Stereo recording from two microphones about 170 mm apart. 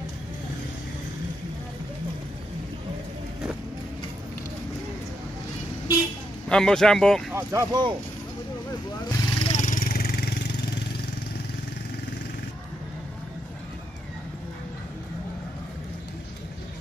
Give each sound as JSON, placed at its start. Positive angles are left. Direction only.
{"t": 6.5, "sound": "speech", "side_deg": 5}
{"t": 7.3, "sound": "speech", "side_deg": -20}
{"t": 9.0, "sound": "vehicle", "side_deg": 35}